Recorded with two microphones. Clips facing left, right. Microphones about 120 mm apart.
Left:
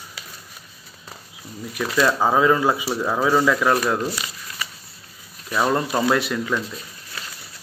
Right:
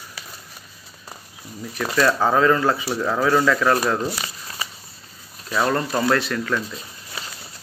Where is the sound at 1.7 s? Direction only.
10° left (ahead or behind).